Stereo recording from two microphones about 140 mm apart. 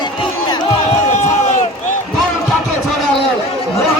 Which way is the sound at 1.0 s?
60° left (ahead or behind).